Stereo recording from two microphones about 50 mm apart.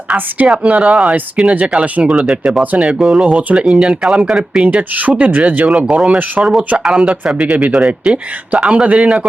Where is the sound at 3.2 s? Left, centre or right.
Right.